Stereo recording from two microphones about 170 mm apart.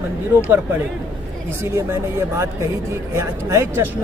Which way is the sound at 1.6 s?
15° right (ahead or behind).